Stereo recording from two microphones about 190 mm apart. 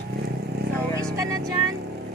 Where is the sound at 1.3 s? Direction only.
20° right (ahead or behind).